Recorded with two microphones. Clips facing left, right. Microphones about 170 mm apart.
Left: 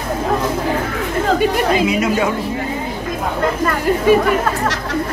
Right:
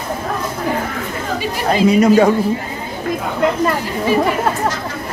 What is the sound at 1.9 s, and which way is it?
Speech, 40° right (ahead or behind).